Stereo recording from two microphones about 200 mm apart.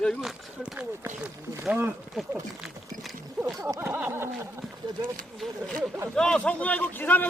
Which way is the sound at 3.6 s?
15° right (ahead or behind).